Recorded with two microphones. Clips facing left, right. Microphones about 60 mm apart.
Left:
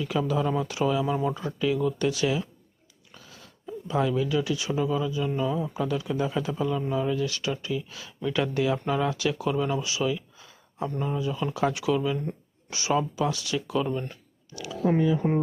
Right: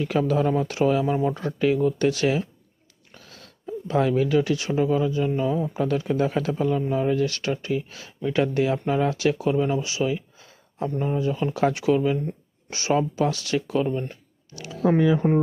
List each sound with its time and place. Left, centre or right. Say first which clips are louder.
0.0 s speech: right 4 dB; right
1.1 s speech: right 3 dB; right
1.4 s speech: right 4 dB; right
3.2 s a sound: right 2 dB; right
3.8 s speech: right 4 dB; right
14.1 s a sound: right 1 dB; right
14.9 s speech: right 4 dB; right